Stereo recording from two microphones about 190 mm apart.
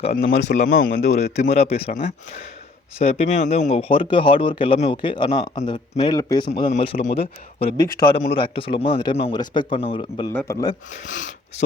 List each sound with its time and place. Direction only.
0.0 s speech: 35° left (ahead or behind)
3.0 s speech: 35° left (ahead or behind)
6.5 s speech: 35° left (ahead or behind)
7.9 s a man's voice: 50° left (ahead or behind)
8.4 s speech: 30° left (ahead or behind)
10.3 s a man's voice: 15° left (ahead or behind)
11.0 s speech: 40° left (ahead or behind)